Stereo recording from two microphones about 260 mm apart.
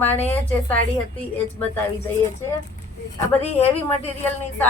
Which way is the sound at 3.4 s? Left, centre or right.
Left.